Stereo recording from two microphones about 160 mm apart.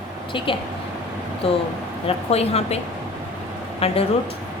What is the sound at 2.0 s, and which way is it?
Speech, 40° left (ahead or behind).